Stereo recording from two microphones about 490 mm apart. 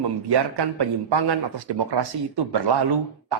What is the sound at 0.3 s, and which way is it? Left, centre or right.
Speech, right.